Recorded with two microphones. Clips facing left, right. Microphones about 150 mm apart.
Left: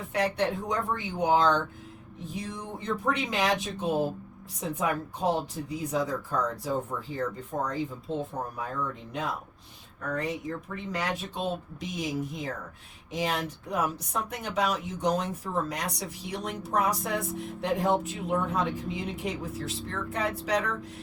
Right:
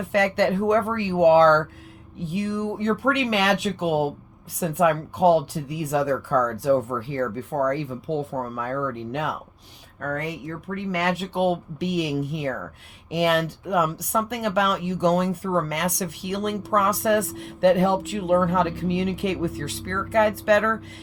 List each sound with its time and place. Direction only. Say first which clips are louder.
0.1 s speech: right 7 dB; 80° right